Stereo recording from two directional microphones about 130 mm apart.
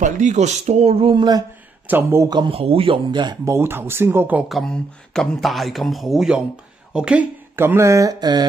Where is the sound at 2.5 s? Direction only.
45° right (ahead or behind).